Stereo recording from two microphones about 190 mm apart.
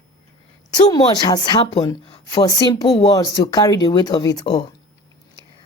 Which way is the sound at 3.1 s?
20° left (ahead or behind).